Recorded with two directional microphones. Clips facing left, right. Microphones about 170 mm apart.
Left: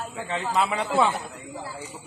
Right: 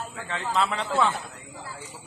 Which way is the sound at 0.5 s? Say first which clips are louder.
Left 2 dB; 10° left (ahead or behind).